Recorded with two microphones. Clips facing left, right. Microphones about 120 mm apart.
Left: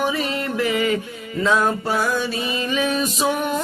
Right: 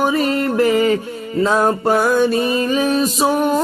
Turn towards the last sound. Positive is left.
turn(degrees=-40)  # may be behind; listen again after turning